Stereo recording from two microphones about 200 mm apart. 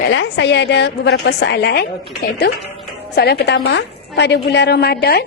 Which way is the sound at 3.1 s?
55° left (ahead or behind).